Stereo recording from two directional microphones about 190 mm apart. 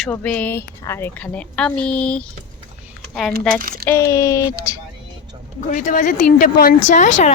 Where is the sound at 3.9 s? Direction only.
15° left (ahead or behind).